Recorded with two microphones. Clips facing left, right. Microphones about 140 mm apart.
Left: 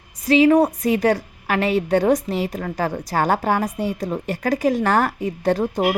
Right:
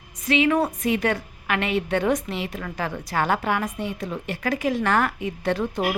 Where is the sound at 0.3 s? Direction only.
35° left (ahead or behind).